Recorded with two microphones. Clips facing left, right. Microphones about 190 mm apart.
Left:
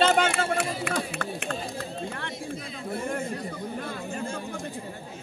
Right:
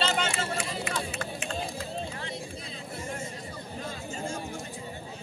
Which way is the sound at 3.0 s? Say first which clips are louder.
Left 6 dB; 60° left (ahead or behind).